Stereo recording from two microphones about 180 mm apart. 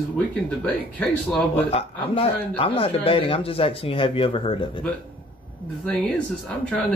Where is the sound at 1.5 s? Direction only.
35° left (ahead or behind).